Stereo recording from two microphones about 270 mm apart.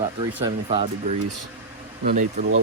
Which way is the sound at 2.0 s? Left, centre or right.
Right.